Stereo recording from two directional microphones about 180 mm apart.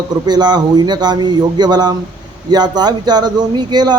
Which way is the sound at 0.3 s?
25° right (ahead or behind).